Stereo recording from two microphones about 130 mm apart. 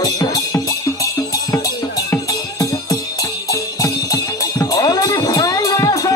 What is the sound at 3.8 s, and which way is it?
Music, 25° left (ahead or behind).